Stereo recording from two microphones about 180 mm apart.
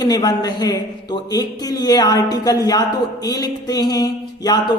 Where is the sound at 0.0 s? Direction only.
20° left (ahead or behind).